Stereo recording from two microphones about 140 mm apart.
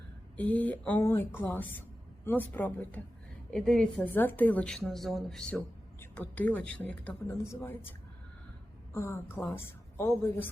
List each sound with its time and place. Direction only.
0.3 s a woman's voice: 10° left (ahead or behind)
7.3 s a woman's voice: 20° left (ahead or behind)